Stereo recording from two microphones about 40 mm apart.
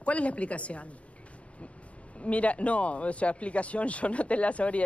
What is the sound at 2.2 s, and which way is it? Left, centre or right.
Speech, left.